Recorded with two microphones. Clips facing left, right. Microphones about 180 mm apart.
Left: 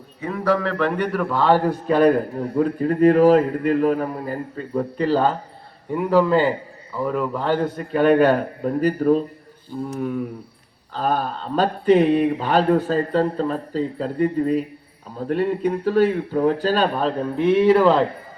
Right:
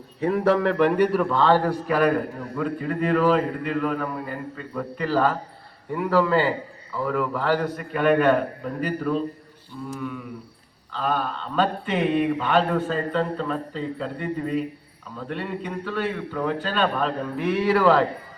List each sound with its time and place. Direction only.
0.2 s a man's voice: 30° right (ahead or behind); by 1.4 s centre (ahead or behind)
1.4 s a man's voice: 15° left (ahead or behind)
1.9 s mantra: 30° left (ahead or behind)
5.9 s a man's voice: 20° left (ahead or behind); by 10.2 s 45° left (ahead or behind)
10.9 s mantra: 40° left (ahead or behind); by 18.0 s 20° left (ahead or behind)